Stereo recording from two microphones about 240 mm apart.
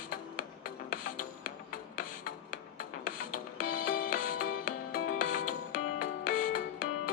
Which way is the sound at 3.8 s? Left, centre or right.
Left.